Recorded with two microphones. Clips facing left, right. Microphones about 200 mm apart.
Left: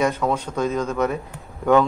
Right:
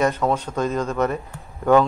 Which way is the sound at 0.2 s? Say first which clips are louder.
Even; 5° right (ahead or behind).